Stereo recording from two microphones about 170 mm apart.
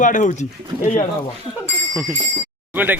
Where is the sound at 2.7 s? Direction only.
10° right (ahead or behind).